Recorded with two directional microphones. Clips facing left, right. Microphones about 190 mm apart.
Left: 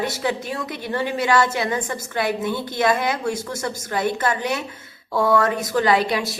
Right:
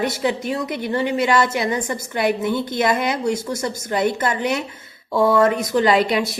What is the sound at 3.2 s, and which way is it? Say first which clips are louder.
A woman's voice: right 3 dB; 15° right (ahead or behind).